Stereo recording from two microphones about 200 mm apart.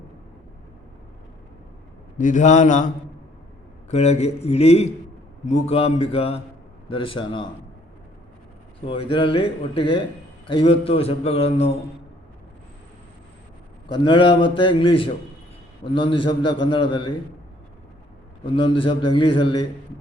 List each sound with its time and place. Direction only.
2.1 s a man's voice: 40° left (ahead or behind)
8.9 s a man's voice: 25° left (ahead or behind)
13.9 s a man's voice: 25° left (ahead or behind)
18.4 s a man's voice: 25° left (ahead or behind)